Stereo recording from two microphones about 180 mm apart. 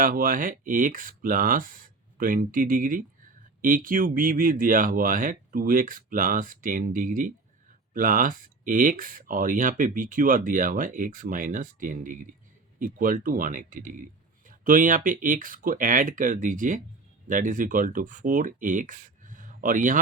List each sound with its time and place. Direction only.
0.0 s speech: 50° right (ahead or behind)